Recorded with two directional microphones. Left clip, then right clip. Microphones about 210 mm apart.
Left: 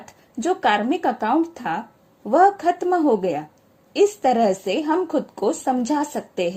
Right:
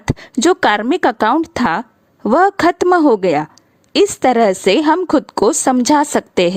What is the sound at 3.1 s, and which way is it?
A woman's voice, 40° right (ahead or behind).